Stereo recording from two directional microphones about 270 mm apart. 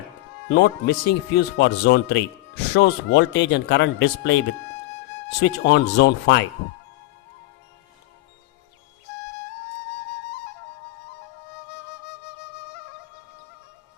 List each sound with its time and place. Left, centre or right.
0.4 s speech: left
5.4 s speech: left